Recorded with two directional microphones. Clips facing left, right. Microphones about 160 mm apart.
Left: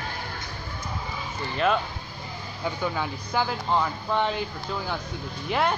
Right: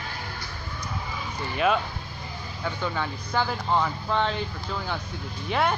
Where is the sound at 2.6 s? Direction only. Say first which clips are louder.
Left 1 dB; 10° left (ahead or behind).